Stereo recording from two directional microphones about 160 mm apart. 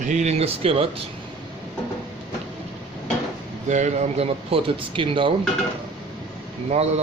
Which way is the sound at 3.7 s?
45° right (ahead or behind).